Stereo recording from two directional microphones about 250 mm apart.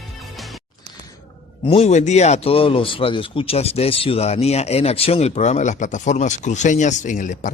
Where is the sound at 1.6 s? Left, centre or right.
Left.